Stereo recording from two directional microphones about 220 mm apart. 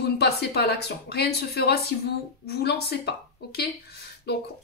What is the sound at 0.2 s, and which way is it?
A woman's voice, 45° left (ahead or behind).